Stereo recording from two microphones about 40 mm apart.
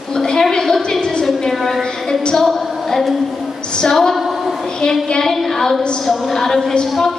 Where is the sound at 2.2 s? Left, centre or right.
Centre.